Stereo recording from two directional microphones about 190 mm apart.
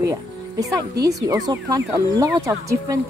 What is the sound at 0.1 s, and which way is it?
Music, 20° right (ahead or behind).